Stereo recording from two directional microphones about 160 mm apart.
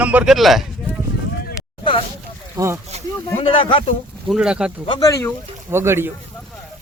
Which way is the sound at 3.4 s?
35° left (ahead or behind).